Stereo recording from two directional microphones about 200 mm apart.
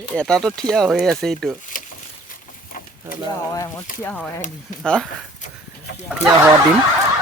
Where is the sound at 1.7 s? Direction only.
40° left (ahead or behind).